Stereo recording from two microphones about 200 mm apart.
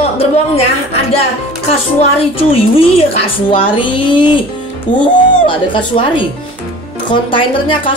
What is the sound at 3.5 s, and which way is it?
A woman's voice, 25° left (ahead or behind).